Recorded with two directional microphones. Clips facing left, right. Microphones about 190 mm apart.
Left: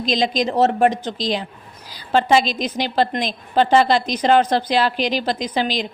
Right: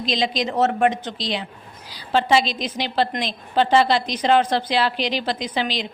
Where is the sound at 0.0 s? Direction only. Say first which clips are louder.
Left 3 dB; 45° left (ahead or behind).